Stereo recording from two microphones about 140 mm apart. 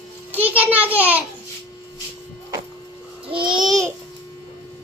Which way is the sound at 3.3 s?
35° right (ahead or behind).